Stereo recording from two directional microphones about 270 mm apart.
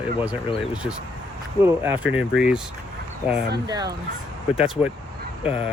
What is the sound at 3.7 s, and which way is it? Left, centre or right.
Speech, centre.